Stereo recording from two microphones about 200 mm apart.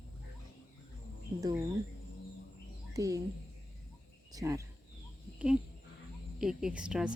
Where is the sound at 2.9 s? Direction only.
15° right (ahead or behind).